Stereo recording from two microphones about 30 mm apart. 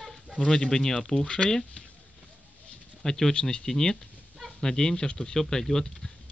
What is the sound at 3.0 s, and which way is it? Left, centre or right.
Speech, centre.